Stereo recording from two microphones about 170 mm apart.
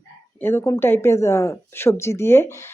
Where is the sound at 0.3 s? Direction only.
15° left (ahead or behind).